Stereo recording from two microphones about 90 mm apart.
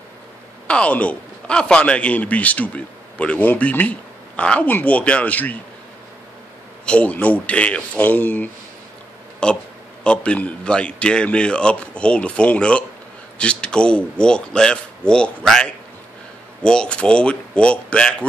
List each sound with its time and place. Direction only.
0.7 s a man's voice: 15° left (ahead or behind)
6.9 s a man's voice: 15° left (ahead or behind)
9.4 s a sound: 10° left (ahead or behind)
10.0 s a man's voice: 15° left (ahead or behind)